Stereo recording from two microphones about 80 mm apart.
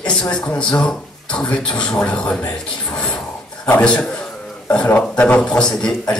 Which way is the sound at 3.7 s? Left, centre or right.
Centre.